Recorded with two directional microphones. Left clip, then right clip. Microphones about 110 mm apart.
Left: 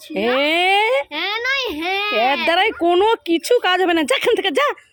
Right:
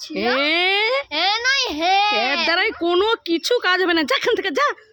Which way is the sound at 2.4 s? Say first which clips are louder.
Left 3 dB; 15° left (ahead or behind).